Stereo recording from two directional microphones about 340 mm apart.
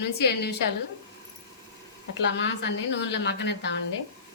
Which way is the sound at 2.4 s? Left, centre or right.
Left.